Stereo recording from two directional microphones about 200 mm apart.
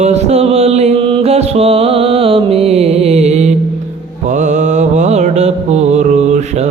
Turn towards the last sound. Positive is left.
turn(degrees=-35)  # may be behind; listen again after turning